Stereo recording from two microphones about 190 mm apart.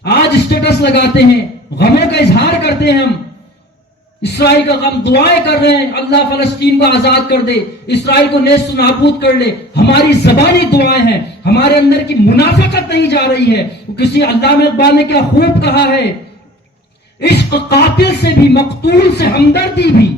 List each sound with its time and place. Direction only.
0.0 s a sound: 60° left (ahead or behind)
1.8 s a man's voice: 60° left (ahead or behind)
4.2 s a man's voice: 60° left (ahead or behind)
17.2 s a man's voice: 60° left (ahead or behind)